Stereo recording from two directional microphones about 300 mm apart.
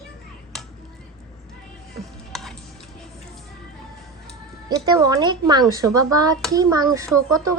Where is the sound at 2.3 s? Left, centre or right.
Centre.